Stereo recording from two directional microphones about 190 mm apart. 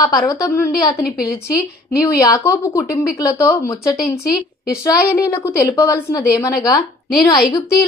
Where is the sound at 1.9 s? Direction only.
15° left (ahead or behind).